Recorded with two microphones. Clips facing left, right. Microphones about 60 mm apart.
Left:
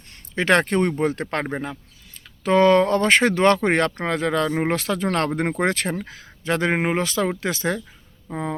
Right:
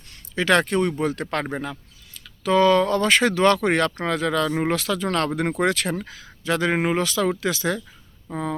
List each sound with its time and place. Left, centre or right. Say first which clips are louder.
0.3 s speech: left 1 dB; left